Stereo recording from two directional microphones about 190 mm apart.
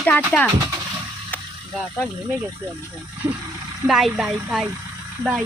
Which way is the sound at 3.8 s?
Centre (ahead or behind).